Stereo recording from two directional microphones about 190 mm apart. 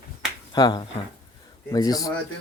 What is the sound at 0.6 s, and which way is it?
Speech, 20° left (ahead or behind).